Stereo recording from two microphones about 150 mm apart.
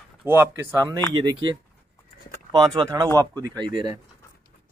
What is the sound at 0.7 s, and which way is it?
Speech, 25° right (ahead or behind).